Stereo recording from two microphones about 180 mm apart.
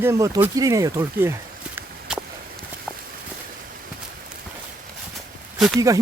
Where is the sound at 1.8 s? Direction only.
5° right (ahead or behind).